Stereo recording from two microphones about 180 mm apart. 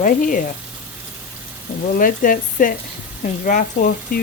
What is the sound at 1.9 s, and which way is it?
Speech, 50° left (ahead or behind).